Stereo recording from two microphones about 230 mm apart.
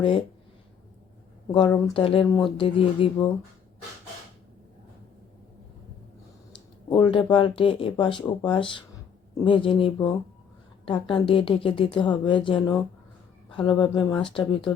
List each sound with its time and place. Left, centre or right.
0.0 s speech: left
1.5 s speech: centre
6.9 s speech: left